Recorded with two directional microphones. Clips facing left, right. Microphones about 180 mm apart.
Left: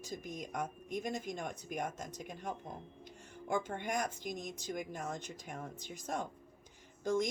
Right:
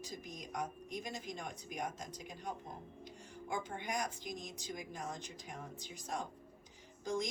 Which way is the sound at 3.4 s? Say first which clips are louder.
Left 5 dB; 50° left (ahead or behind).